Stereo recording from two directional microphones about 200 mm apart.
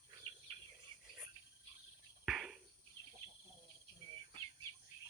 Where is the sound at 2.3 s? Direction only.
5° right (ahead or behind).